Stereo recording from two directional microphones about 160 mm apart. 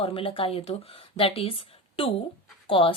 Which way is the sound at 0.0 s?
35° left (ahead or behind).